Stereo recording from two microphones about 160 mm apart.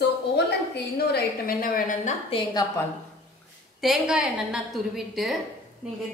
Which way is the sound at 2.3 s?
25° left (ahead or behind).